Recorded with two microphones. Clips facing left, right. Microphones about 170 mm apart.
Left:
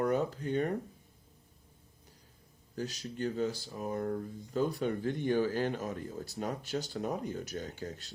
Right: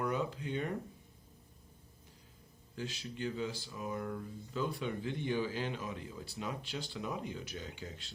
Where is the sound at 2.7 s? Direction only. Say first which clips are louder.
Left 4 dB; 40° left (ahead or behind).